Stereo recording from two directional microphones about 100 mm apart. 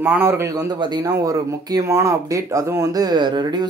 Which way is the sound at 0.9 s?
40° right (ahead or behind).